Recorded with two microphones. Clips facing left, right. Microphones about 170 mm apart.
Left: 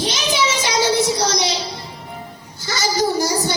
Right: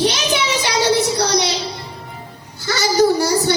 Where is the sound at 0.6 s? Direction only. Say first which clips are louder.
Right 2 dB; 65° right (ahead or behind).